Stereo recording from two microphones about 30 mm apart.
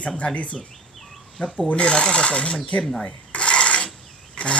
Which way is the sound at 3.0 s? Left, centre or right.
Left.